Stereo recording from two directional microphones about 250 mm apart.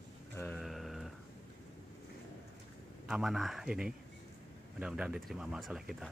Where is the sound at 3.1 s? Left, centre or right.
Centre.